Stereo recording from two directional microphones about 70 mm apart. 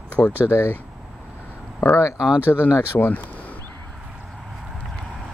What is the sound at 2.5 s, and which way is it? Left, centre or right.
Speech, left.